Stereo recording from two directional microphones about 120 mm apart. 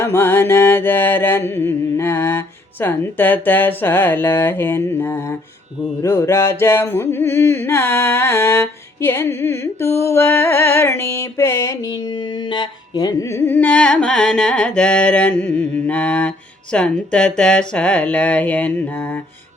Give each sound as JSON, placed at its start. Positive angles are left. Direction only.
{"t": 0.0, "sound": "music", "side_deg": 20}
{"t": 12.5, "sound": "a sound", "side_deg": 40}
{"t": 13.3, "sound": "carnatic music", "side_deg": 20}